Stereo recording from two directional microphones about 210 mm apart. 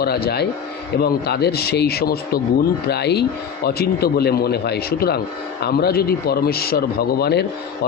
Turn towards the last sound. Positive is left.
turn(degrees=50)  # may be behind; listen again after turning